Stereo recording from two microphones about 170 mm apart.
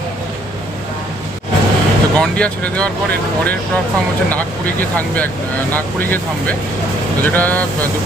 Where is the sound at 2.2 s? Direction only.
5° left (ahead or behind).